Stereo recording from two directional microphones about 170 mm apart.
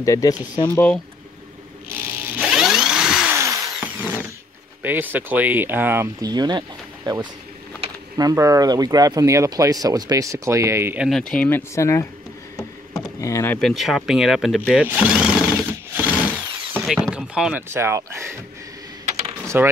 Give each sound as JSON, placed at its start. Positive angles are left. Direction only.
{"t": 0.0, "sound": "speech", "side_deg": 20}
{"t": 2.3, "sound": "a sound", "side_deg": -5}
{"t": 3.3, "sound": "tools", "side_deg": -20}
{"t": 4.8, "sound": "speech", "side_deg": -10}
{"t": 6.2, "sound": "speech", "side_deg": -25}
{"t": 11.1, "sound": "speech", "side_deg": 5}
{"t": 13.2, "sound": "speech", "side_deg": 15}
{"t": 13.6, "sound": "speech", "side_deg": 0}
{"t": 19.4, "sound": "a sound", "side_deg": -15}